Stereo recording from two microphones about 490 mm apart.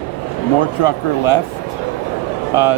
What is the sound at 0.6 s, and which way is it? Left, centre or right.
Speech, left.